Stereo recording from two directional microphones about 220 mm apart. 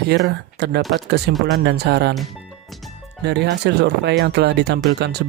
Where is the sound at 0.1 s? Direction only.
50° right (ahead or behind).